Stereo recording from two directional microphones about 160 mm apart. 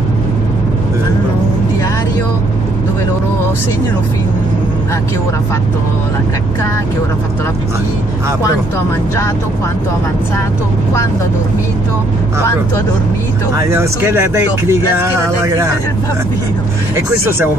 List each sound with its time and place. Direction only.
13.6 s speech: 15° right (ahead or behind)